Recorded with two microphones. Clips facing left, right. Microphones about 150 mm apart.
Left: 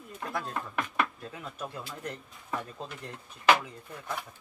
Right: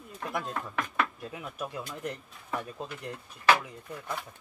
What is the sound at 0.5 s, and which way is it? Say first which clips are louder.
Speech: even; centre (ahead or behind).